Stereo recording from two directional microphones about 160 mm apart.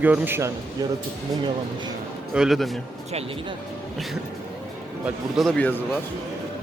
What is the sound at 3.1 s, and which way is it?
Speech, 40° right (ahead or behind).